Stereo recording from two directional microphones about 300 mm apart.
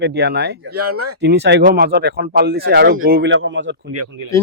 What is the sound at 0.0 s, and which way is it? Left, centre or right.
Speech, right.